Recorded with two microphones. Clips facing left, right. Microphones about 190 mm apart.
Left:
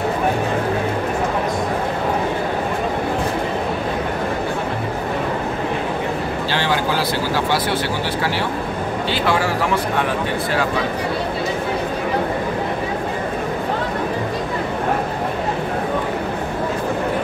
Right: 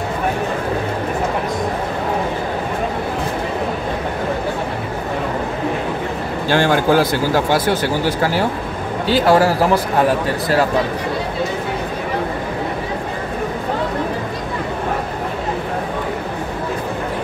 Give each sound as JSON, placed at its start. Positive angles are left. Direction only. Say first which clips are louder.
{"t": 6.5, "sound": "speech", "louder": "right 8 dB", "side_deg": -50}